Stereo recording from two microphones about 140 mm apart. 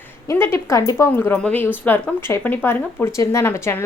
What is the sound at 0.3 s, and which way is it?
A woman's voice, 15° left (ahead or behind).